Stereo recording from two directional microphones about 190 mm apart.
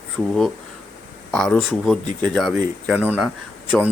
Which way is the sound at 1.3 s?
5° left (ahead or behind).